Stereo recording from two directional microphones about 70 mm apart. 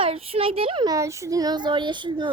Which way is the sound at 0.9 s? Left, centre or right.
Right.